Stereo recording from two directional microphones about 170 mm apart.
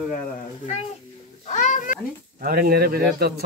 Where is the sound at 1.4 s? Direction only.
45° left (ahead or behind).